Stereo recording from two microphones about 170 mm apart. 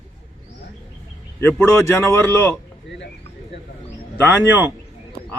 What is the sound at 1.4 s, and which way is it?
Speech, 15° left (ahead or behind).